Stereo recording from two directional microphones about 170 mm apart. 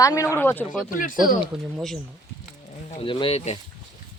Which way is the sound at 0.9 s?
55° left (ahead or behind).